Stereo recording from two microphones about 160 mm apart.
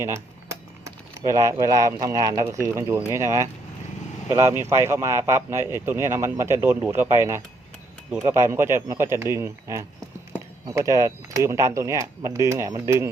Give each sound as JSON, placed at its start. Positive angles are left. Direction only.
{"t": 0.9, "sound": "speech", "side_deg": -20}